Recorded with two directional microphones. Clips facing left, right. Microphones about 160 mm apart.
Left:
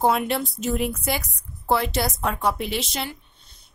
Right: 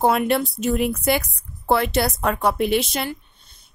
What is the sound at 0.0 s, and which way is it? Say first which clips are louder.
Speech: right 3 dB; 60° right (ahead or behind).